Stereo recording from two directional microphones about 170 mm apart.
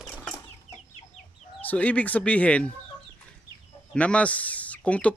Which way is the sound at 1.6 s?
10° left (ahead or behind).